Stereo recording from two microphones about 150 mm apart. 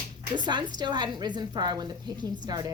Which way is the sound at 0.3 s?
30° right (ahead or behind).